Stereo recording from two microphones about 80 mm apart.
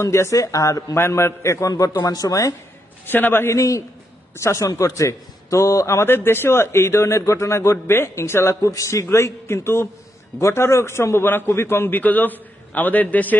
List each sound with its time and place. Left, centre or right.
0.0 s speech: left
0.9 s a man's voice: left
3.1 s a man's voice: left